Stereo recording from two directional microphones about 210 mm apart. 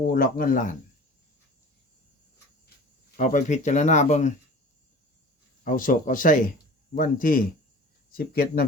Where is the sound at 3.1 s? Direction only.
40° left (ahead or behind).